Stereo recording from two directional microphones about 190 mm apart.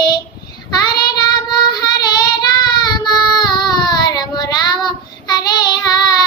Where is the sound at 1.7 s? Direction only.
20° left (ahead or behind).